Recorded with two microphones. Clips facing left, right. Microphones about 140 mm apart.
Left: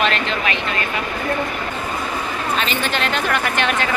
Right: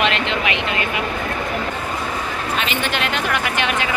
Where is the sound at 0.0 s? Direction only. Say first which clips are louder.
Even; 20° right (ahead or behind).